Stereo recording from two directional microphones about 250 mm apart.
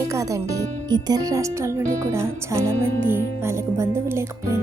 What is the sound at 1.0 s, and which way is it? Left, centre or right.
Speech, centre.